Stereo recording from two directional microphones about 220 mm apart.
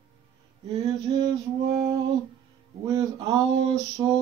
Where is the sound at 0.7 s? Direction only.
25° right (ahead or behind).